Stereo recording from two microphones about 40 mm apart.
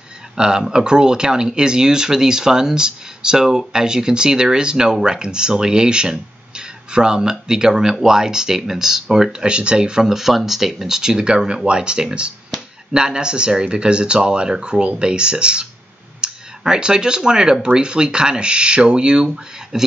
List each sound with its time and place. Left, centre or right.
0.4 s speech: centre
9.4 s speech: right
10.0 s speech: centre